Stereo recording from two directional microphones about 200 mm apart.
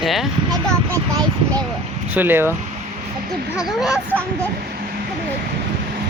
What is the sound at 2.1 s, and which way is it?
Speech, 10° right (ahead or behind).